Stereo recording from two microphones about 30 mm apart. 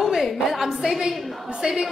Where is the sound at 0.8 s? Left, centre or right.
Centre.